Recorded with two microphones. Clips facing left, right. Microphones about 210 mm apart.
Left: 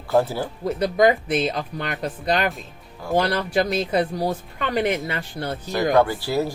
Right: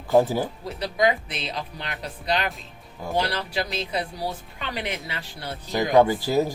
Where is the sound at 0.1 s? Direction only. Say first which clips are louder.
Right 1 dB; 15° right (ahead or behind).